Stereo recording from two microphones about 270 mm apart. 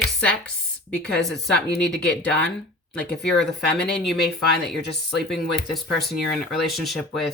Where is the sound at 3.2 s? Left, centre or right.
Left.